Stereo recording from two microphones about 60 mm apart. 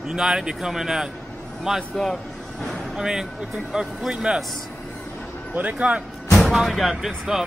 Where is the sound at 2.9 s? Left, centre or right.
Centre.